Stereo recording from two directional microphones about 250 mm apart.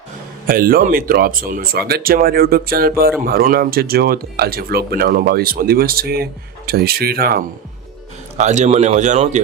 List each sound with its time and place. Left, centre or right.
0.4 s speech: right